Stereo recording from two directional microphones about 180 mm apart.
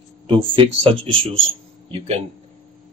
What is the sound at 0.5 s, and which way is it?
Speech, 30° right (ahead or behind).